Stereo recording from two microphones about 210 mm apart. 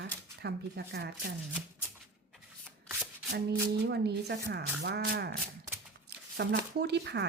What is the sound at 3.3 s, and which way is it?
Speech, 55° right (ahead or behind).